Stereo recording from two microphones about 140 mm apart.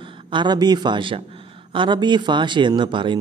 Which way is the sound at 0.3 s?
30° right (ahead or behind).